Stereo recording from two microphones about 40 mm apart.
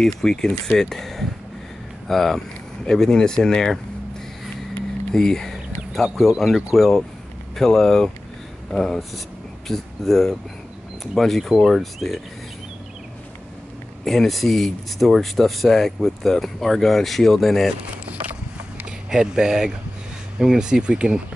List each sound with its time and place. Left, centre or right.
0.0 s speech: centre
2.8 s speech: centre
5.1 s speech: centre
6.1 s speech: centre
14.0 s speech: centre
19.0 s speech: centre